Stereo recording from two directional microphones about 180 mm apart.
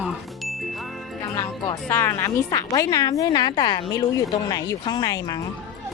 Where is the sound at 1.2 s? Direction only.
15° left (ahead or behind).